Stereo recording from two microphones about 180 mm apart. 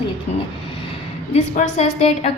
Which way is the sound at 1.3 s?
40° left (ahead or behind).